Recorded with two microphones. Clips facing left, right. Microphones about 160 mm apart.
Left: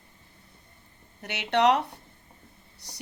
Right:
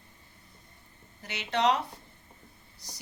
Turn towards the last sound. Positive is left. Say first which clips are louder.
# even
turn(degrees=65)  # may be behind; listen again after turning